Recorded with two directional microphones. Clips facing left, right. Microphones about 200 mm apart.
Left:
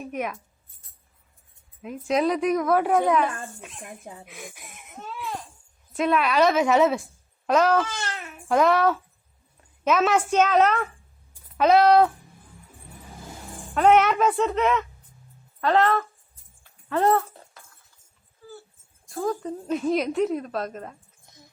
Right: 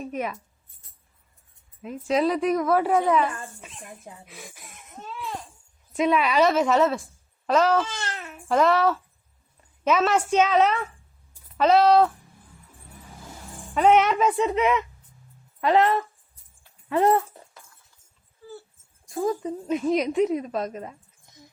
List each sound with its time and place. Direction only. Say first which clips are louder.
0.0 s speech: even; 5° left (ahead or behind)
1.8 s speech: even; centre (ahead or behind)
4.3 s laughter: left 3 dB; centre (ahead or behind)
6.1 s speech: even; 5° right (ahead or behind)
6.6 s speech: left 1 dB; 5° left (ahead or behind)
10.0 s speech: left 1 dB; 5° left (ahead or behind)
13.7 s speech: even; 5° left (ahead or behind)
19.1 s a woman's voice: right 2 dB; 20° right (ahead or behind)
19.5 s speech: right 1 dB; centre (ahead or behind)